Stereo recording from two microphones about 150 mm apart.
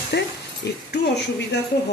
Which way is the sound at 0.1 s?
90° left.